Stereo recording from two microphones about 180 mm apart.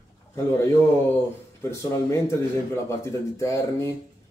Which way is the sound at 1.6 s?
15° left (ahead or behind).